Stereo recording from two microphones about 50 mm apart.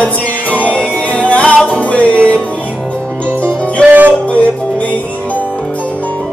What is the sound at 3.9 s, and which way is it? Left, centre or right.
Music, right.